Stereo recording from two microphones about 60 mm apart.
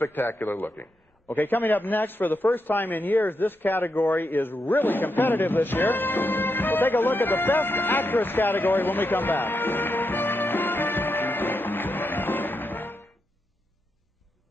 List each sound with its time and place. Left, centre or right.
0.0 s a man's voice: left